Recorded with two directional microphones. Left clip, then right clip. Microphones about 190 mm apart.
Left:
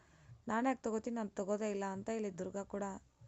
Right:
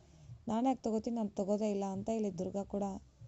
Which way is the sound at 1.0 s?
50° left (ahead or behind).